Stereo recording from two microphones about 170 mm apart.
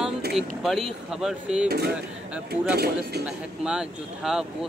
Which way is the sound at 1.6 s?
70° right (ahead or behind).